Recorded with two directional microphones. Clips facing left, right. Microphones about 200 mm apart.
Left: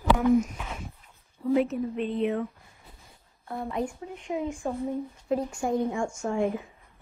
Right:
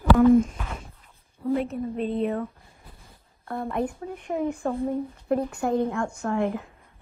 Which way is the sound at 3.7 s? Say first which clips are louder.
Right 3 dB; 60° right (ahead or behind).